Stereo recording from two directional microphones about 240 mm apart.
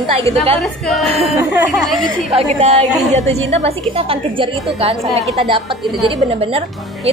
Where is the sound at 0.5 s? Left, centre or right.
Centre.